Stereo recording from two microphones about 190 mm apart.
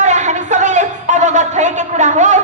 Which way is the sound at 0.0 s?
40° right (ahead or behind).